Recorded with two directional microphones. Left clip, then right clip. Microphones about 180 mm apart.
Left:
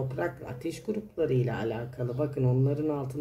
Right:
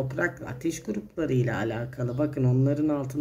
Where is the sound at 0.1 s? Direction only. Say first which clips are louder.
Right 4 dB; 40° right (ahead or behind).